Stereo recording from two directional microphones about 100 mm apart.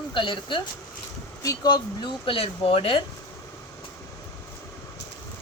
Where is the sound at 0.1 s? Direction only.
55° left (ahead or behind).